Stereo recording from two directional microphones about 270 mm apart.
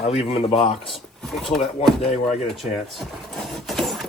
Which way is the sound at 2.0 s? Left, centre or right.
Centre.